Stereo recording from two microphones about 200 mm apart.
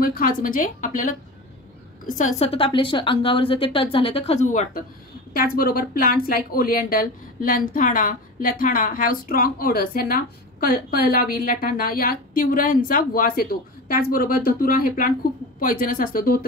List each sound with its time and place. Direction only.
0.0 s a woman's voice: 45° left (ahead or behind)
2.1 s a woman's voice: 35° left (ahead or behind)